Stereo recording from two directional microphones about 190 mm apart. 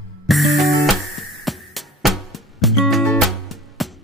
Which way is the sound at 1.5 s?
Centre (ahead or behind).